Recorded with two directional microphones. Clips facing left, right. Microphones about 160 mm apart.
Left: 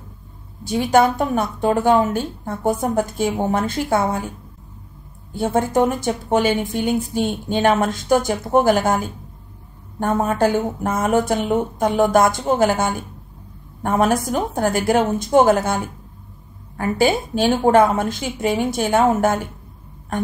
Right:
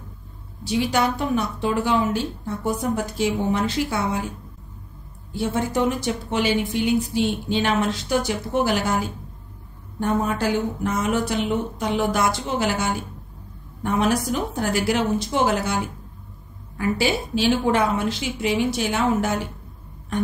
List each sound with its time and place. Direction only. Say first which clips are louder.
0.7 s speech: left 6 dB; 50° left (ahead or behind)
5.3 s speech: left 5 dB; 50° left (ahead or behind)